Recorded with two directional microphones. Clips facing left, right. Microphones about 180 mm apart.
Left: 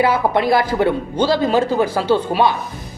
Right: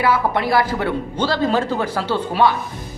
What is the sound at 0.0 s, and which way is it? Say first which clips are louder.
A woman's voice: left 3 dB; 20° left (ahead or behind).